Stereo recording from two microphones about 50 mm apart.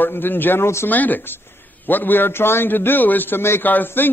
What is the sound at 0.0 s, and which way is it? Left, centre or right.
A man's voice, left.